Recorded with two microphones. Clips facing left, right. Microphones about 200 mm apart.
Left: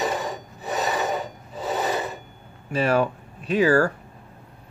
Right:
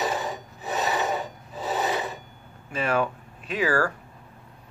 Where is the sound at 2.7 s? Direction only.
35° left (ahead or behind).